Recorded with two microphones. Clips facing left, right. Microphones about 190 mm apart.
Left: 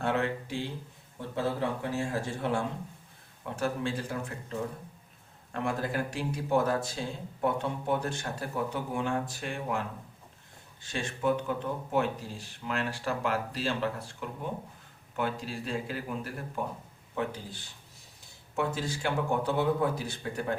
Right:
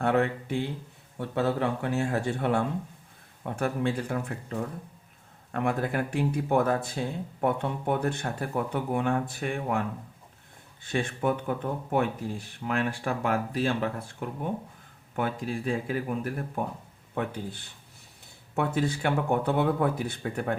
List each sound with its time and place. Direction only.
0.0 s speech: 55° right (ahead or behind)
10.8 s speech: 55° right (ahead or behind)